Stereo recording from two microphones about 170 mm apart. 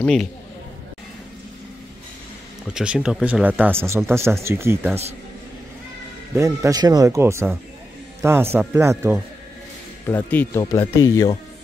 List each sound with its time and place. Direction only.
0.0 s a man's voice: 5° left (ahead or behind)
2.7 s speech: 5° right (ahead or behind)
6.3 s speech: 15° right (ahead or behind)
10.0 s speech: 10° left (ahead or behind)